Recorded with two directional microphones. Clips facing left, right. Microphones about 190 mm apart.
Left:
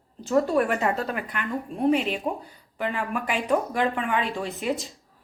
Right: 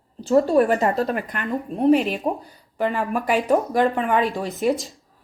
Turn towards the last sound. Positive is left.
turn(degrees=-40)  # may be behind; listen again after turning